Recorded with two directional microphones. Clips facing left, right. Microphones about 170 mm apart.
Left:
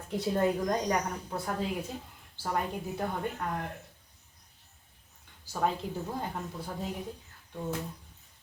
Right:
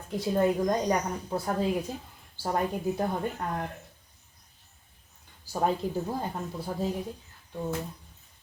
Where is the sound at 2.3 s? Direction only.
35° right (ahead or behind).